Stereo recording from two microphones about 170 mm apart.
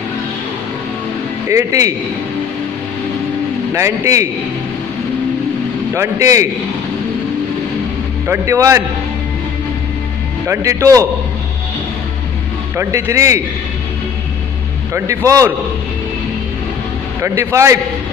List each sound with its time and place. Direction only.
1.5 s speech: 20° right (ahead or behind)
3.7 s speech: 15° right (ahead or behind)
5.9 s a man's voice: 20° right (ahead or behind)
8.3 s speech: 15° right (ahead or behind)
10.4 s speech: 15° right (ahead or behind)
12.7 s speech: 15° right (ahead or behind)
15.0 s speech: 20° right (ahead or behind)
17.2 s speech: 15° right (ahead or behind)